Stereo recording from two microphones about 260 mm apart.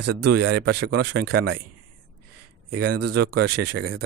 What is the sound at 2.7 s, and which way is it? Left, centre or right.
Speech, right.